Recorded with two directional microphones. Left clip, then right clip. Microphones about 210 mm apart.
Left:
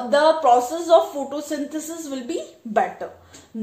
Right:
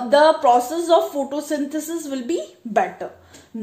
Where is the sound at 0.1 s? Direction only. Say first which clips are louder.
Right 2 dB; 35° right (ahead or behind).